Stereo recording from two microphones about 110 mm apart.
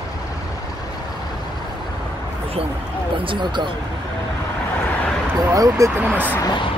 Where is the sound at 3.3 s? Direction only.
45° right (ahead or behind).